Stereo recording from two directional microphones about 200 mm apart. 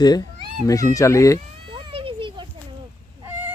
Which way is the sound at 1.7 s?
25° right (ahead or behind).